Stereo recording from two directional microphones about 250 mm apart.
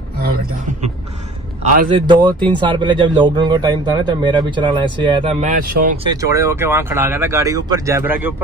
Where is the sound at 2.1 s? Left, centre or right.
Centre; by 6.0 s right.